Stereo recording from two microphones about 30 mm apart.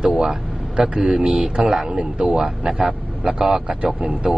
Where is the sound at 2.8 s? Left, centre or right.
Right.